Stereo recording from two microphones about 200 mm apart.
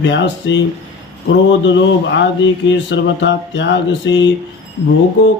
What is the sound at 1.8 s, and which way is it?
Mantra, 65° left (ahead or behind).